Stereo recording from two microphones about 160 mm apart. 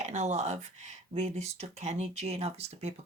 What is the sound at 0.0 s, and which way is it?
Speech, 45° right (ahead or behind).